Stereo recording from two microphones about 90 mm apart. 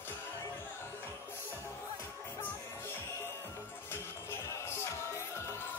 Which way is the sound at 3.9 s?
25° left (ahead or behind).